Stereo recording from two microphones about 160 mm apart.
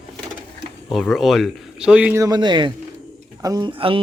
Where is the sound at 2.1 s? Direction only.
25° right (ahead or behind).